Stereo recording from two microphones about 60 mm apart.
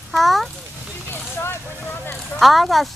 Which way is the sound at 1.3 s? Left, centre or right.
Left.